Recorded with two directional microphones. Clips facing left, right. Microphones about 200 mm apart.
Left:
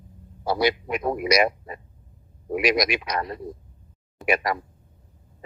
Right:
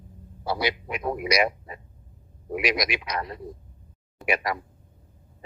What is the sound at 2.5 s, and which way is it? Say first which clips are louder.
A man's voice: left 4 dB; 45° left (ahead or behind).